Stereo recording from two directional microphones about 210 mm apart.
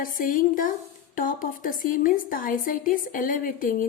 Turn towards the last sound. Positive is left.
turn(degrees=40)  # may be behind; listen again after turning